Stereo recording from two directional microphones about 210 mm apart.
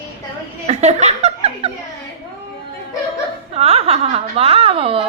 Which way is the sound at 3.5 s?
30° right (ahead or behind).